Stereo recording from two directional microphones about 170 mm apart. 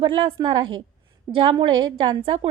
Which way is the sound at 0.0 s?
30° right (ahead or behind).